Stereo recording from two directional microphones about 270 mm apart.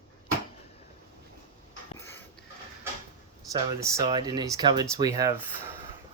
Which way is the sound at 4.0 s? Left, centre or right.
Centre.